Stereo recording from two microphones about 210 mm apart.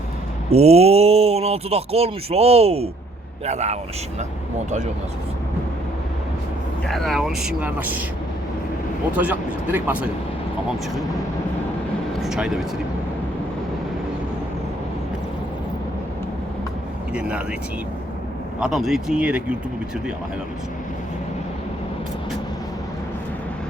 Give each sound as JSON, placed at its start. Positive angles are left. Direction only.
{"t": 0.5, "sound": "a man's voice", "side_deg": -30}
{"t": 6.8, "sound": "speech", "side_deg": 0}
{"t": 9.1, "sound": "speech", "side_deg": -5}
{"t": 12.2, "sound": "speech", "side_deg": 0}
{"t": 17.2, "sound": "speech", "side_deg": -5}
{"t": 18.6, "sound": "speech", "side_deg": 0}